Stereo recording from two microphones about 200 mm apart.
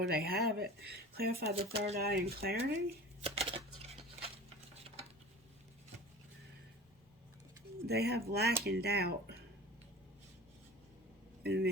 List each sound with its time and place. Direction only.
0.0 s speech: 50° right (ahead or behind)
1.5 s speech: 30° right (ahead or behind)
2.0 s speech: 50° right (ahead or behind)
3.2 s a sound: 30° right (ahead or behind)
7.9 s speech: 55° right (ahead or behind)
11.4 s speech: 55° right (ahead or behind)